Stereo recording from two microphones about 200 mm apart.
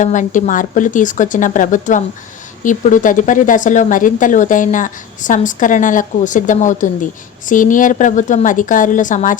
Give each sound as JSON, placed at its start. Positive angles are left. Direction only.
{"t": 0.0, "sound": "speech", "side_deg": 40}